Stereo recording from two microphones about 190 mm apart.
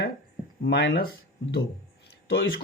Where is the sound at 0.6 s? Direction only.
55° left (ahead or behind).